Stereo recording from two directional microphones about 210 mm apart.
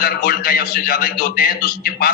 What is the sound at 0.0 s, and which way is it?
A man's voice, 45° left (ahead or behind).